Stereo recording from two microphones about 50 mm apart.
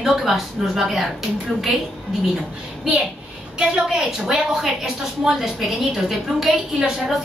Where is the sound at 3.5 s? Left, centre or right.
Centre.